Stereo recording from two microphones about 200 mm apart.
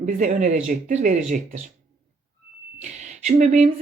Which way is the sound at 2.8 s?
35° right (ahead or behind).